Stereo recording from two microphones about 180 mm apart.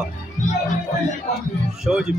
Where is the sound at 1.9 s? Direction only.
5° right (ahead or behind).